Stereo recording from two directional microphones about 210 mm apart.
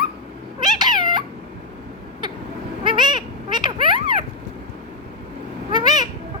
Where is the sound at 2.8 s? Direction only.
20° right (ahead or behind).